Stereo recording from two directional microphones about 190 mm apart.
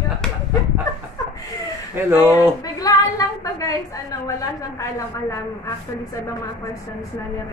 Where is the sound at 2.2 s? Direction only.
10° right (ahead or behind).